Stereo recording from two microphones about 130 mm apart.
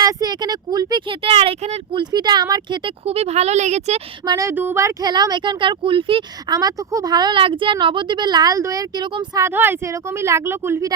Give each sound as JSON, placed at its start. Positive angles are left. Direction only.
{"t": 0.0, "sound": "a woman's voice", "side_deg": -30}
{"t": 2.0, "sound": "a woman's voice", "side_deg": -35}
{"t": 3.1, "sound": "speech", "side_deg": -55}
{"t": 4.3, "sound": "speech", "side_deg": -25}
{"t": 5.0, "sound": "a woman's voice", "side_deg": -35}
{"t": 6.6, "sound": "a woman's voice", "side_deg": -30}
{"t": 9.4, "sound": "speech", "side_deg": -20}